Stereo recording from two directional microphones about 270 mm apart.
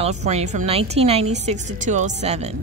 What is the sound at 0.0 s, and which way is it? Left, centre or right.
A woman's voice, right.